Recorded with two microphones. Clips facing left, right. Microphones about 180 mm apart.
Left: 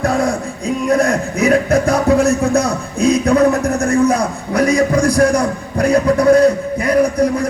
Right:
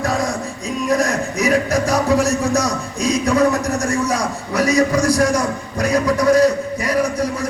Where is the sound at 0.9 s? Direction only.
55° left (ahead or behind).